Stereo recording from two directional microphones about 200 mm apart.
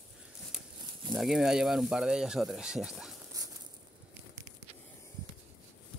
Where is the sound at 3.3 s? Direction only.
15° right (ahead or behind).